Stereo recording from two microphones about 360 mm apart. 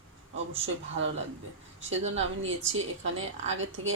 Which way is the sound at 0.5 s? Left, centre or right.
Right.